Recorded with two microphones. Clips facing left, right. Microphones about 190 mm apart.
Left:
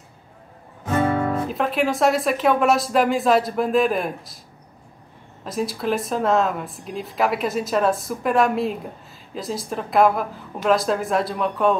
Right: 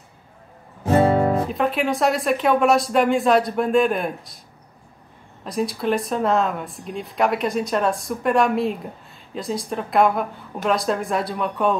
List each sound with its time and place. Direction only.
0.8 s music: 30° right (ahead or behind)
1.5 s speech: centre (ahead or behind)
5.4 s speech: centre (ahead or behind)